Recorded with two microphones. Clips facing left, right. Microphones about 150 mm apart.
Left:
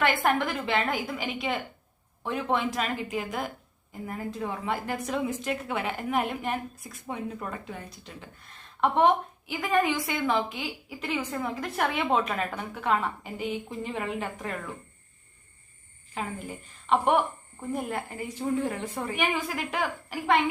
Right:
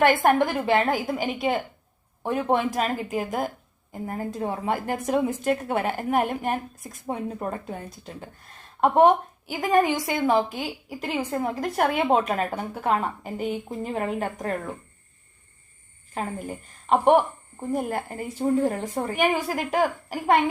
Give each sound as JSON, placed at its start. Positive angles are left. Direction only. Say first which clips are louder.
{"t": 0.0, "sound": "a woman's voice", "louder": "right 6 dB", "side_deg": -45}
{"t": 16.1, "sound": "a woman's voice", "louder": "right 4 dB", "side_deg": -45}